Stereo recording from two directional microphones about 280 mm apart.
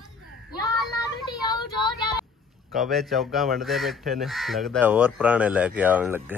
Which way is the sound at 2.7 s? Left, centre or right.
Centre.